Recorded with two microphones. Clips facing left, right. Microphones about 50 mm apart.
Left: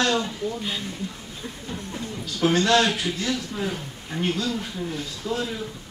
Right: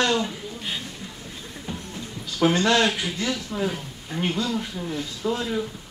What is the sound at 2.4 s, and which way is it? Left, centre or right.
Speech, centre.